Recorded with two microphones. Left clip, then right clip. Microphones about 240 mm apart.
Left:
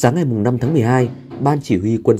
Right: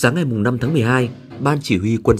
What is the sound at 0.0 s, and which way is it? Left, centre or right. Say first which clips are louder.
Speech: left 1 dB; centre.